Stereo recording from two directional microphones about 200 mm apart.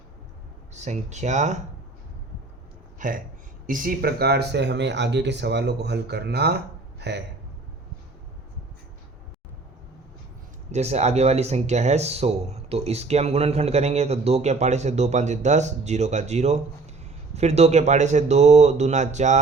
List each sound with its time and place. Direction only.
0.7 s speech: 35° right (ahead or behind)
3.0 s speech: 40° right (ahead or behind); by 7.2 s 55° right (ahead or behind)
10.7 s speech: 35° right (ahead or behind)